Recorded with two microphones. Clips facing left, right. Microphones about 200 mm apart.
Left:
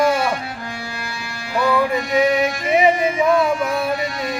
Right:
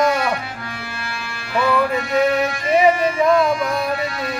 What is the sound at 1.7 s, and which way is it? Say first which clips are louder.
Speech: left 1 dB; 15° left (ahead or behind).